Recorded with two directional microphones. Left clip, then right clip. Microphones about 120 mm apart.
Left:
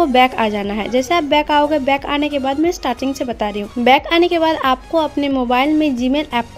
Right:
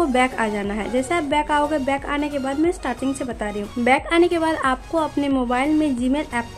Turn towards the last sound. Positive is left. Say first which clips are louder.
# left 5 dB
turn(degrees=25)  # may be behind; listen again after turning